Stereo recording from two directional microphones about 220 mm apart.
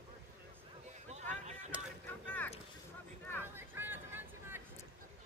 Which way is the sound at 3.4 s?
10° right (ahead or behind).